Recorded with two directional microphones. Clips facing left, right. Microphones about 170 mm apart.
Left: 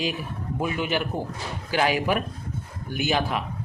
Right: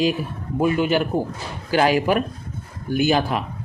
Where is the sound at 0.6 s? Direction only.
35° right (ahead or behind).